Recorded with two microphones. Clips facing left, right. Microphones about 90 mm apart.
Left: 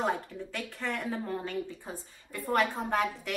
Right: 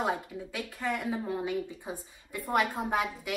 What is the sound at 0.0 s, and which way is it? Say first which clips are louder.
A woman's voice: even; 5° right (ahead or behind).